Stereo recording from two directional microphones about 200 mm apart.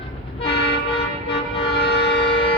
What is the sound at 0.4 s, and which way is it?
Vehicle, 30° left (ahead or behind).